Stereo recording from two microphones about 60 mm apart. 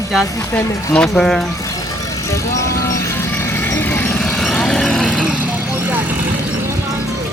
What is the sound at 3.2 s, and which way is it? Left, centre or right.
Vehicle, left.